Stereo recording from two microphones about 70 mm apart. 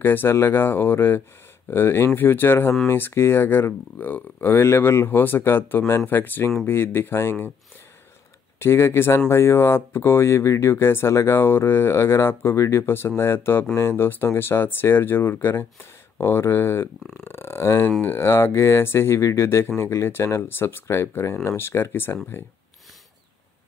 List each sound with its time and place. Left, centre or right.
0.0 s speech: left
8.5 s speech: left
12.8 s speech: left